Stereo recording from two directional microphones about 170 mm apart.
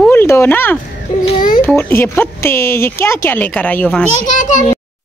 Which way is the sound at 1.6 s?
15° left (ahead or behind).